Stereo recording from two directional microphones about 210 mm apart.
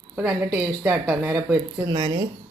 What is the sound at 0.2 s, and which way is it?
Speech, 10° right (ahead or behind).